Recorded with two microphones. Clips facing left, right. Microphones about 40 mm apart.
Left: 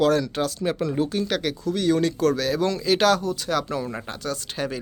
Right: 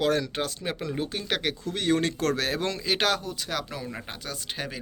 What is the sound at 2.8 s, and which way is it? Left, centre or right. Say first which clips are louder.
Speech: left 7 dB; centre.